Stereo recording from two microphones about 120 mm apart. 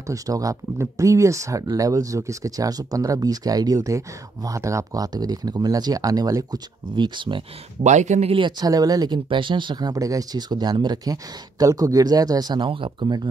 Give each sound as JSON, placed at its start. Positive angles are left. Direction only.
{"t": 0.0, "sound": "speech", "side_deg": -30}
{"t": 7.8, "sound": "speech", "side_deg": -80}
{"t": 8.3, "sound": "speech", "side_deg": -40}